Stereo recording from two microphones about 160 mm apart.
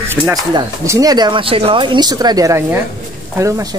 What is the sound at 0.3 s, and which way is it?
Speech, 20° right (ahead or behind).